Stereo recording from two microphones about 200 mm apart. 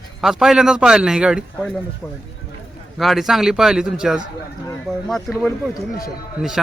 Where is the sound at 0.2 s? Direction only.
Centre (ahead or behind).